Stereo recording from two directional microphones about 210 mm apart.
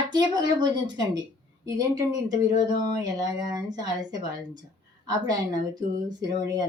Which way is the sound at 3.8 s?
20° right (ahead or behind).